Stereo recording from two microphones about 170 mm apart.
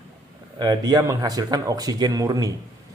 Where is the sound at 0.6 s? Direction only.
25° right (ahead or behind).